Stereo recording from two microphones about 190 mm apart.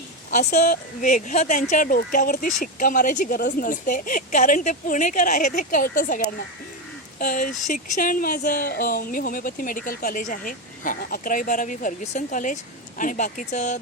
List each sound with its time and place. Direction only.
0.3 s a woman's voice: 40° left (ahead or behind)